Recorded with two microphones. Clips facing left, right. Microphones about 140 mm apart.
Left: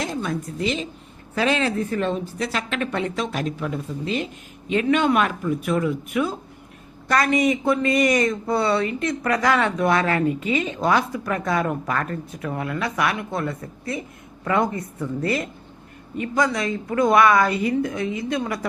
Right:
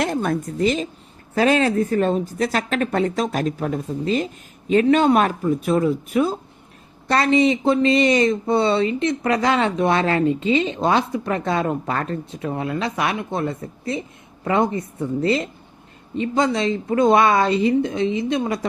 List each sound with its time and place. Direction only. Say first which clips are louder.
0.0 s a woman's voice: right 5 dB; 55° right (ahead or behind); by 18.6 s 25° right (ahead or behind)